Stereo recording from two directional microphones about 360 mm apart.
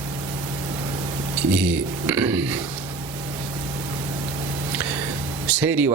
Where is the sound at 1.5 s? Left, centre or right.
Centre.